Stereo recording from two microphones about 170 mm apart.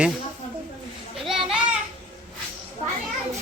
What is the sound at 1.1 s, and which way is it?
Children playing, centre (ahead or behind).